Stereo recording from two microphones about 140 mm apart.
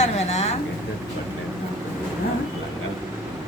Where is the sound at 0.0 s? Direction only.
50° left (ahead or behind).